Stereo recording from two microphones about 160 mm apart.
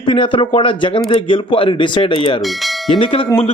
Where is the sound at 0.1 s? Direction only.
35° left (ahead or behind).